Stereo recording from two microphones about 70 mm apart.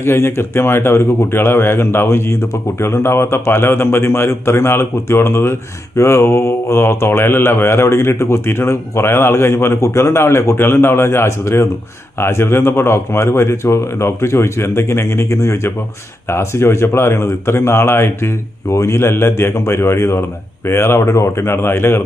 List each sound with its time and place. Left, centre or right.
0.0 s speech: left